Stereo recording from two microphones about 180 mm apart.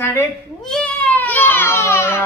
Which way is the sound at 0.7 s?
5° left (ahead or behind).